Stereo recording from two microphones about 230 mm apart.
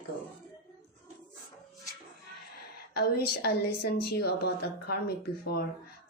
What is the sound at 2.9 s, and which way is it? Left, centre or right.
A woman's voice, left.